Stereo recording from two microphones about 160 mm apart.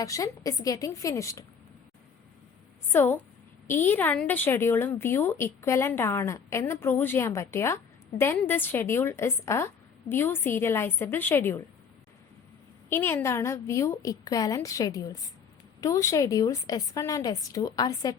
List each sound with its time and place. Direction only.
0.0 s a woman's voice: 20° left (ahead or behind)
2.9 s a woman's voice: 15° left (ahead or behind)
12.9 s a woman's voice: 15° left (ahead or behind)